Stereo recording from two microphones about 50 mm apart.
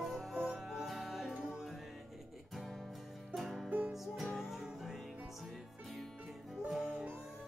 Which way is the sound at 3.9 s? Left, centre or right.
Centre.